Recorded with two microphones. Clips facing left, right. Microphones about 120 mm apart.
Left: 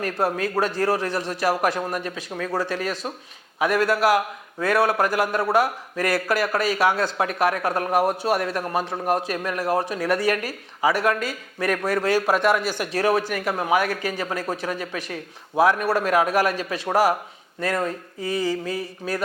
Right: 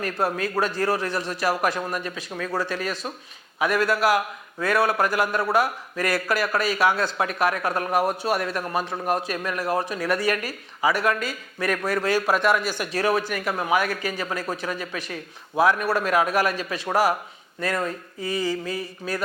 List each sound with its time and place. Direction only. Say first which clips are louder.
0.0 s speech: left 2 dB; 45° left (ahead or behind)
2.6 s speech: left 2 dB; 55° left (ahead or behind)